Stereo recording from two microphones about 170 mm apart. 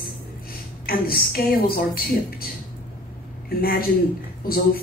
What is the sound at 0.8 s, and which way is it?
A woman's voice, 60° left (ahead or behind).